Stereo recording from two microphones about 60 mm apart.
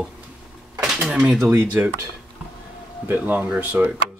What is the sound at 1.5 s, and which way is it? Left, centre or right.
Speech, right.